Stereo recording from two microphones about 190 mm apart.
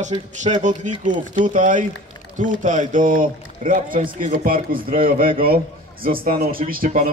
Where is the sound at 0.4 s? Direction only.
40° right (ahead or behind).